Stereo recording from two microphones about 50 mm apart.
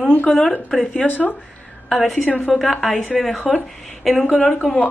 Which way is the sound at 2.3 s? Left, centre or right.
Left.